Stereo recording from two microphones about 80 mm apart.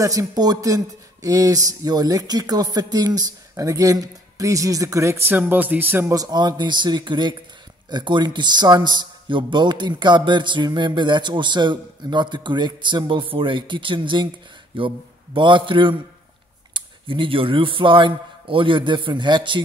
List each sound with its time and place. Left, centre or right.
0.0 s speech: right
5.3 s speech: right
6.0 s a man's voice: right
14.7 s speech: right